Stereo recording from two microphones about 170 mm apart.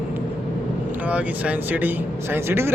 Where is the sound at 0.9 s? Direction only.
10° right (ahead or behind).